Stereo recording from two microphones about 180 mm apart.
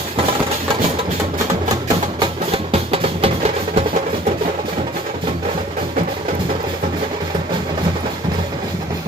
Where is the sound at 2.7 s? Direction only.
30° right (ahead or behind).